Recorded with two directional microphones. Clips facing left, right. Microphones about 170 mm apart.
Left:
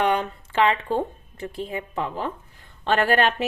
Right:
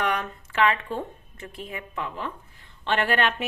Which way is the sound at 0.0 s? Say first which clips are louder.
Left 5 dB; 30° left (ahead or behind).